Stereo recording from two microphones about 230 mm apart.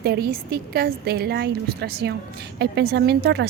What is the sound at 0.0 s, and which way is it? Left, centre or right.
A woman's voice, right.